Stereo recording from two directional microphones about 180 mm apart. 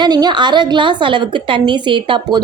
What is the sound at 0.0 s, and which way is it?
A woman's voice, 25° right (ahead or behind).